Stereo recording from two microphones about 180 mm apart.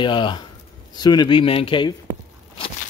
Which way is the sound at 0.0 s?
25° left (ahead or behind).